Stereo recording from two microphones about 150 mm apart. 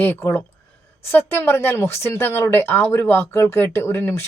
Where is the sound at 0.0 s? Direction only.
15° left (ahead or behind).